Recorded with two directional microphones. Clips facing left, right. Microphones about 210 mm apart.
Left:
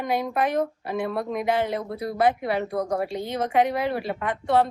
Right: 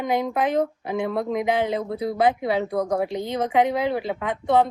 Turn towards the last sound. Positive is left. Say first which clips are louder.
# right 2 dB
turn(degrees=-20)  # may be behind; listen again after turning